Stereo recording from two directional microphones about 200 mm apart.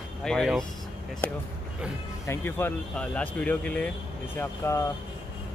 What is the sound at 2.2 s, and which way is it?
Speech, 10° left (ahead or behind).